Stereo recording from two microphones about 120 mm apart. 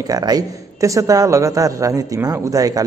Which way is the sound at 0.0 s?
30° right (ahead or behind).